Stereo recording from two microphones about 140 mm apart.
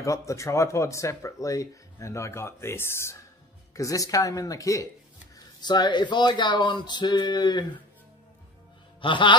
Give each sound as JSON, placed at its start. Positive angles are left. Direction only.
{"t": 0.0, "sound": "speech", "side_deg": 20}
{"t": 9.0, "sound": "speech", "side_deg": 35}